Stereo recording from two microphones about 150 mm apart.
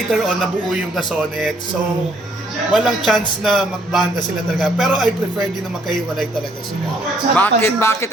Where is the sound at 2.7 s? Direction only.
Centre (ahead or behind).